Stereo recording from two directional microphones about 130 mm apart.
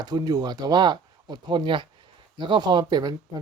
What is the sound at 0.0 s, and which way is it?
Speech, 30° right (ahead or behind).